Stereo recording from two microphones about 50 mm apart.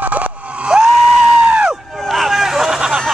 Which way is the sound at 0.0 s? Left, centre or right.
Right.